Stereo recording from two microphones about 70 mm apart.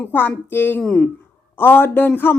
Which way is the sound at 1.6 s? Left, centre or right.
Left.